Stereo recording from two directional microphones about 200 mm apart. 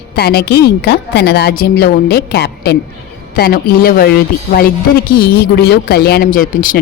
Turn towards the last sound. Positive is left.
turn(degrees=45)  # may be behind; listen again after turning